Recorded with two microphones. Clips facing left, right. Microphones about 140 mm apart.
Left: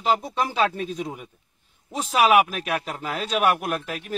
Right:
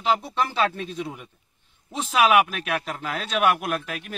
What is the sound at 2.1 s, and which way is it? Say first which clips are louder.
Speech: left 1 dB; 35° left (ahead or behind).